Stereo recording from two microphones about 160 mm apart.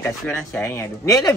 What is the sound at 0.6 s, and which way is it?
Speech, 15° left (ahead or behind).